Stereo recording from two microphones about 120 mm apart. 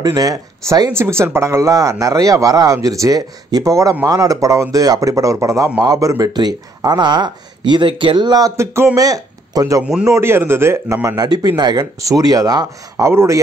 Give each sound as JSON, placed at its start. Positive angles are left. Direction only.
{"t": 0.0, "sound": "speech", "side_deg": -30}
{"t": 0.9, "sound": "a man's voice", "side_deg": -20}